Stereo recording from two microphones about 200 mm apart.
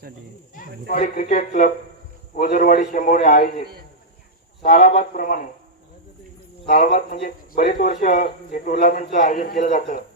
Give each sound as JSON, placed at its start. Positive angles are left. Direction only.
{"t": 0.5, "sound": "a man's voice", "side_deg": 45}
{"t": 6.7, "sound": "a man's voice", "side_deg": 40}